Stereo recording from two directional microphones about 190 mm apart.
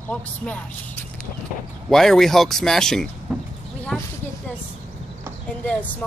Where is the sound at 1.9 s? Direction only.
Centre (ahead or behind).